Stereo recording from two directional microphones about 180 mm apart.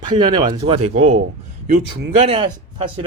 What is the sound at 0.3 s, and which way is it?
Speech, 25° right (ahead or behind).